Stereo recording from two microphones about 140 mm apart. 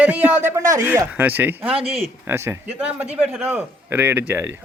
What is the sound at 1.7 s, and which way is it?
Speech, 45° right (ahead or behind).